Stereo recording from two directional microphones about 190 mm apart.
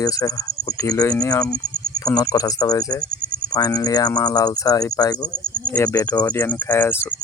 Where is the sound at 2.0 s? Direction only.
20° left (ahead or behind).